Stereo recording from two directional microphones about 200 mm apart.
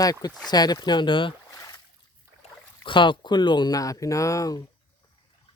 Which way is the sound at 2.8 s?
25° left (ahead or behind).